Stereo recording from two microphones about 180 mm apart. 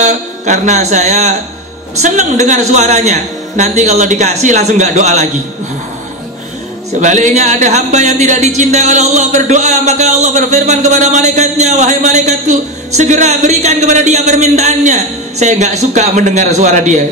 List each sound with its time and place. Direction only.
0.0 s speech: 40° right (ahead or behind)
7.0 s speech: 45° right (ahead or behind)